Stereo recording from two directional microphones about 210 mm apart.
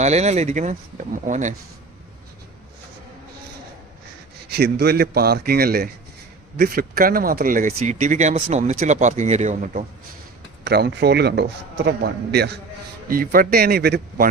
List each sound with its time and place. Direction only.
0.0 s speech: 30° right (ahead or behind)
4.4 s a man's voice: 50° right (ahead or behind)
10.6 s a man's voice: 50° right (ahead or behind)